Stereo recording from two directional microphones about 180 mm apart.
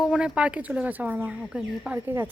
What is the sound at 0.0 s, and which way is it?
Speech, 5° right (ahead or behind).